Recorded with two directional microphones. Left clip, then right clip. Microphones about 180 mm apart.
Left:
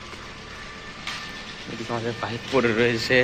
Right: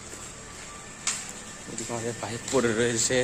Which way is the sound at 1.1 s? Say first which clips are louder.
Even; 15° right (ahead or behind).